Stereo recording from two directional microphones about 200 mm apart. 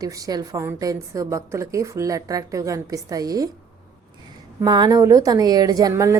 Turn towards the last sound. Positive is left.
turn(degrees=-15)  # may be behind; listen again after turning